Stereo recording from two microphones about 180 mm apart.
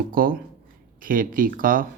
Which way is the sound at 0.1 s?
50° right (ahead or behind).